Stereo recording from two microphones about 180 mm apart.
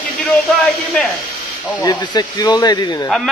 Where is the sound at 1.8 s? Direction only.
25° left (ahead or behind).